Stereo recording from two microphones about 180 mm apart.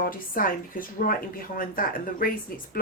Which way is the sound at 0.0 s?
50° left (ahead or behind).